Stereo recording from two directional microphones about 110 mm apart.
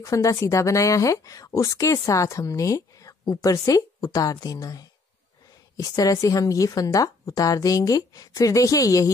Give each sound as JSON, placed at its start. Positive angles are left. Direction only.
{"t": 0.0, "sound": "speech", "side_deg": 30}